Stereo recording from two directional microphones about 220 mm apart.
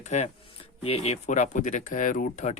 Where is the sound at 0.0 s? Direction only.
30° left (ahead or behind).